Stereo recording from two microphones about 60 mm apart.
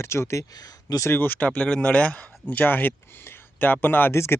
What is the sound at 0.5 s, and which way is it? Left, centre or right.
Speech, left.